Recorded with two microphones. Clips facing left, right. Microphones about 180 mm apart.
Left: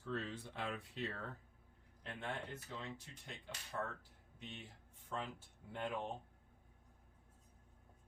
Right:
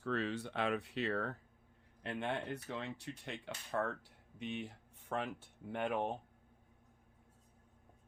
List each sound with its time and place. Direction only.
0.0 s speech: 75° right (ahead or behind)